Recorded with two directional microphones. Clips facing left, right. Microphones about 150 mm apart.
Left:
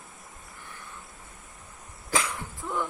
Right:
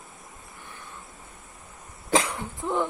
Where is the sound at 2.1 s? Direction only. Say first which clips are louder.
Right 5 dB; 25° right (ahead or behind).